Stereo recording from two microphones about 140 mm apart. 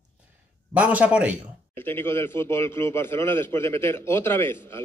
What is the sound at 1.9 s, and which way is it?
A man's voice, 15° left (ahead or behind).